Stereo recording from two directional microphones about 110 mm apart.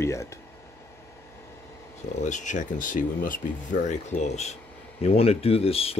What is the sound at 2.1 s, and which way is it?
Speech, 90° left.